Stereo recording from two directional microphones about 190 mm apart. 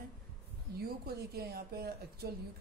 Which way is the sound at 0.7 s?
55° right (ahead or behind).